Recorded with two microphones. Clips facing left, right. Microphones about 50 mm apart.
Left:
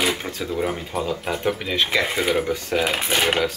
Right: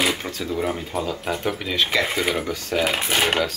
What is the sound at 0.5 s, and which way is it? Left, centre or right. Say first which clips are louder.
Speech: even; centre.